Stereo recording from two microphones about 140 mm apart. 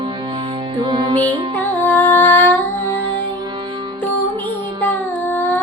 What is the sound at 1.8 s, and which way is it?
Music, 15° left (ahead or behind).